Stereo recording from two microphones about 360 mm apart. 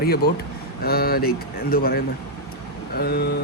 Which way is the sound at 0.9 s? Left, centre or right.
Left.